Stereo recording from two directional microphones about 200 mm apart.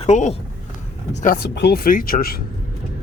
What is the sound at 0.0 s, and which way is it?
Speech, 35° left (ahead or behind).